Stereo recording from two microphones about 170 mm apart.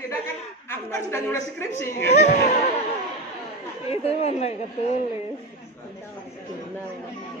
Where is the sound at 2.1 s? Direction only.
40° left (ahead or behind).